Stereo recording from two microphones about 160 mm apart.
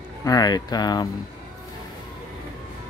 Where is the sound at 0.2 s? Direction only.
25° left (ahead or behind).